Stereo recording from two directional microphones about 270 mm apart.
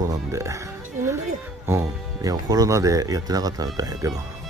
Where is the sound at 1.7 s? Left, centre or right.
Centre.